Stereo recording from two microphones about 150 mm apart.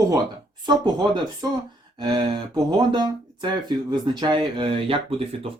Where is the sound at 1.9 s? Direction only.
30° right (ahead or behind).